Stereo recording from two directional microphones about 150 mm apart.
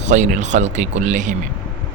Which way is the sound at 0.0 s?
55° right (ahead or behind).